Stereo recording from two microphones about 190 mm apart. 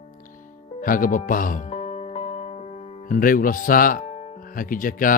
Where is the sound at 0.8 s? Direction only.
45° left (ahead or behind).